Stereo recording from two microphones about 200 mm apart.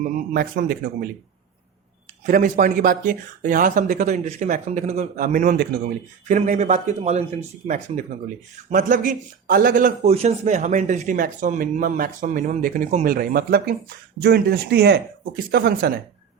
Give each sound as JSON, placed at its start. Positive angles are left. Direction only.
{"t": 0.0, "sound": "speech", "side_deg": -45}
{"t": 2.2, "sound": "speech", "side_deg": -40}
{"t": 8.7, "sound": "speech", "side_deg": -40}
{"t": 13.1, "sound": "speech", "side_deg": -50}